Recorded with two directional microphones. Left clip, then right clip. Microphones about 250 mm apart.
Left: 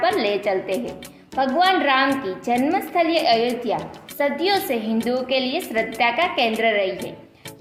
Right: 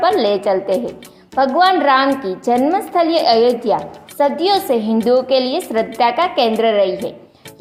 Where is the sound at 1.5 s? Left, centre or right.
Right.